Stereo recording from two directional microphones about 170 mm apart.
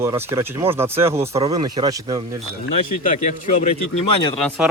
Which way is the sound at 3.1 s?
40° left (ahead or behind).